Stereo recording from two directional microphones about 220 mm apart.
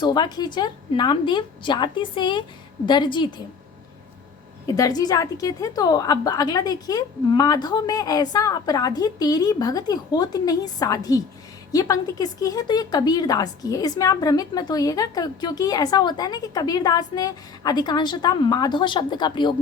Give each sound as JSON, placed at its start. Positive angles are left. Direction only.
{"t": 0.0, "sound": "a woman's voice", "side_deg": 20}
{"t": 4.6, "sound": "speech", "side_deg": 15}